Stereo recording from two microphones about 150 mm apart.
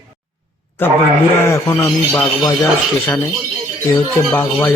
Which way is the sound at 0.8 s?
15° left (ahead or behind).